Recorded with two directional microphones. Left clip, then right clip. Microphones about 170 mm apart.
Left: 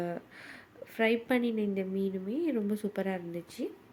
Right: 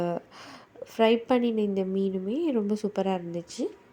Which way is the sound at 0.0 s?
25° right (ahead or behind).